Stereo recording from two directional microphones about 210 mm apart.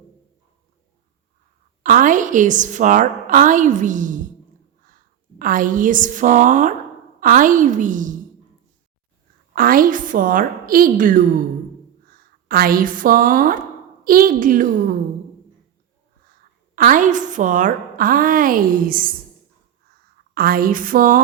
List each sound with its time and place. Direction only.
1.8 s a woman's voice: 40° right (ahead or behind)
5.4 s a woman's voice: 40° right (ahead or behind)
9.6 s a woman's voice: 40° right (ahead or behind)
16.7 s a woman's voice: 40° right (ahead or behind)
20.3 s a woman's voice: 45° right (ahead or behind)